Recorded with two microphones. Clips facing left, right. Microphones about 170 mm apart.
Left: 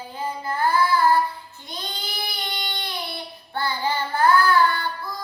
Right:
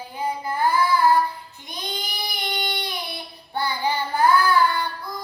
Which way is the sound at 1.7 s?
15° right (ahead or behind).